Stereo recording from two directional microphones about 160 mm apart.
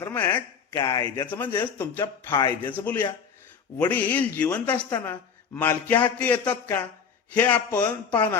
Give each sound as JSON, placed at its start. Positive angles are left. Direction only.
{"t": 0.0, "sound": "speech", "side_deg": 10}
{"t": 0.7, "sound": "speech", "side_deg": 25}
{"t": 1.3, "sound": "a man's voice", "side_deg": 10}
{"t": 2.3, "sound": "speech", "side_deg": 30}
{"t": 2.7, "sound": "a man's voice", "side_deg": 10}
{"t": 4.9, "sound": "speech", "side_deg": 25}
{"t": 5.5, "sound": "a man's voice", "side_deg": 10}